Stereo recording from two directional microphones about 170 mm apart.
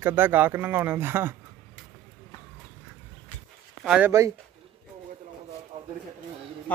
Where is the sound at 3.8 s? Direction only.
5° right (ahead or behind).